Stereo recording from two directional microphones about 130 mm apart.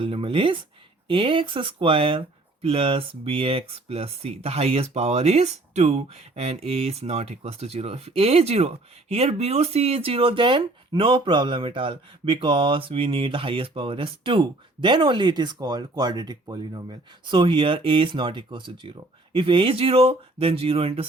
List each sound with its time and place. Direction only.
0.0 s speech: 45° right (ahead or behind)